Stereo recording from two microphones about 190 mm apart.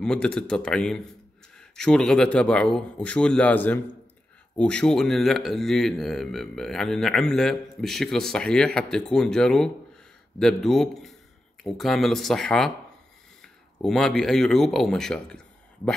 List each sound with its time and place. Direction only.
0.0 s speech: 5° left (ahead or behind)